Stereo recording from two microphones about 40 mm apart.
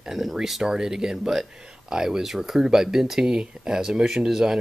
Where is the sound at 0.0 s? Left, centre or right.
Centre.